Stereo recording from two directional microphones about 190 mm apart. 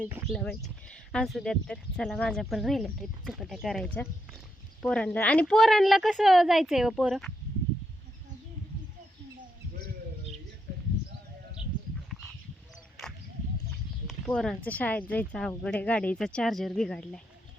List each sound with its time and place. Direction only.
0.3 s speech: 5° left (ahead or behind)
14.1 s speech: 5° left (ahead or behind)